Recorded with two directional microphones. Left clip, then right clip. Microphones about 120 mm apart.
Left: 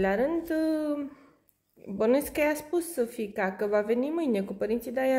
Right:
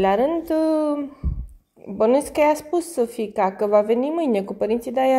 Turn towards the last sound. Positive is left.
turn(degrees=-30)  # may be behind; listen again after turning